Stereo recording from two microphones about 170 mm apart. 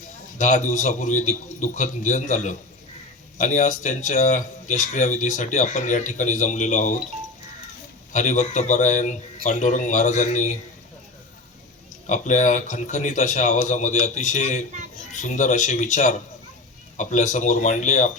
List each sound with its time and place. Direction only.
0.3 s speech: 45° left (ahead or behind)
8.1 s speech: 45° left (ahead or behind)
12.0 s speech: 45° left (ahead or behind)